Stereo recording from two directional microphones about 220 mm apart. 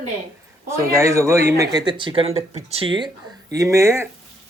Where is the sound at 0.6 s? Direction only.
10° right (ahead or behind).